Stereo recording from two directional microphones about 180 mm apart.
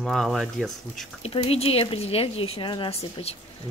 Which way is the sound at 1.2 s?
35° left (ahead or behind).